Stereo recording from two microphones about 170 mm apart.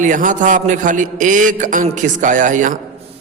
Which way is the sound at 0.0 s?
50° right (ahead or behind).